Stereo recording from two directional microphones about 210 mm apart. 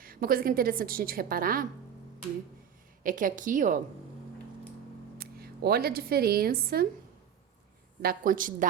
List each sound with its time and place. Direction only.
0.0 s a woman's voice: 45° right (ahead or behind)
3.0 s a woman's voice: 40° right (ahead or behind)
5.1 s speech: 45° right (ahead or behind)
8.0 s a woman's voice: 40° right (ahead or behind)